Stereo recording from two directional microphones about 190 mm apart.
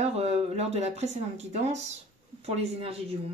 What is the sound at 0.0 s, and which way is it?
Speech, 35° right (ahead or behind).